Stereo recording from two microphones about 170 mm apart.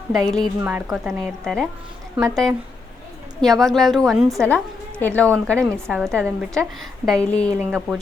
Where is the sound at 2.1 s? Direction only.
20° right (ahead or behind).